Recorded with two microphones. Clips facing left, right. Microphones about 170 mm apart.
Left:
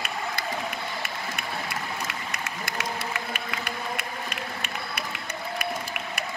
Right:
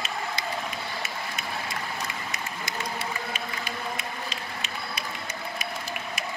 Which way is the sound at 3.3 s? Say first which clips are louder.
Left 1 dB; 65° left (ahead or behind).